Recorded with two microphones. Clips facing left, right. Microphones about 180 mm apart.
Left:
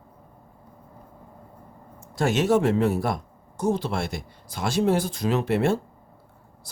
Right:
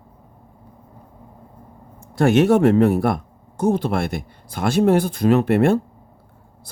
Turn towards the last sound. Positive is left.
turn(degrees=-55)  # may be behind; listen again after turning